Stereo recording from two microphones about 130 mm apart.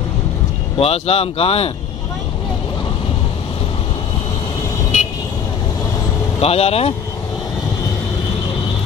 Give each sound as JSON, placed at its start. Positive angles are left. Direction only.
{"t": 0.7, "sound": "speech", "side_deg": 50}
{"t": 6.4, "sound": "speech", "side_deg": 50}